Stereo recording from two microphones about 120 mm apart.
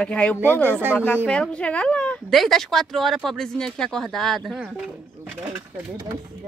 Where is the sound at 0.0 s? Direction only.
10° left (ahead or behind).